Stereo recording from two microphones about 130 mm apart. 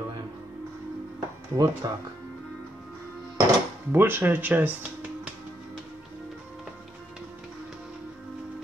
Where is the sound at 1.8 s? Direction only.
30° right (ahead or behind).